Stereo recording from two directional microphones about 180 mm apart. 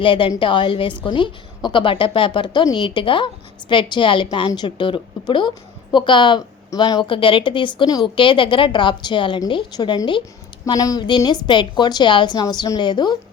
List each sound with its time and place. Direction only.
0.0 s a woman's voice: 30° left (ahead or behind)